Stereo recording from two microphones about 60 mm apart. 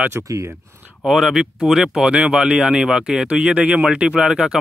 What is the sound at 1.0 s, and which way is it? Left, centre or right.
Speech, centre.